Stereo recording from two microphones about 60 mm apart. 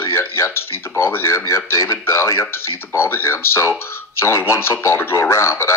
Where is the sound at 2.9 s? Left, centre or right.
Left.